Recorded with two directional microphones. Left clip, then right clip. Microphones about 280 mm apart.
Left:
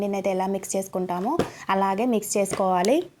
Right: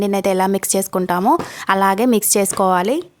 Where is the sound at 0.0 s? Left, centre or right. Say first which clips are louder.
Right 8 dB; right.